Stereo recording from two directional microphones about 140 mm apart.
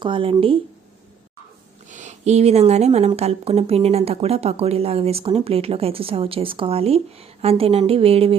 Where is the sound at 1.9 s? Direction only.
60° right (ahead or behind).